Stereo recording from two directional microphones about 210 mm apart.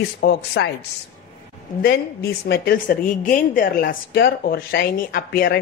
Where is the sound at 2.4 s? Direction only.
45° left (ahead or behind).